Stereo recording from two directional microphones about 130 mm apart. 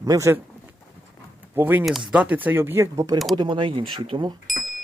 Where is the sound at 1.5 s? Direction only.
15° right (ahead or behind).